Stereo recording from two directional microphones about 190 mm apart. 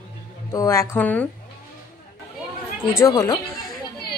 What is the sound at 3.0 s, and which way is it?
Speech, 20° left (ahead or behind).